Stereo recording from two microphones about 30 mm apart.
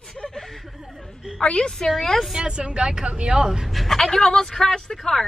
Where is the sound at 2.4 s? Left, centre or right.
Right.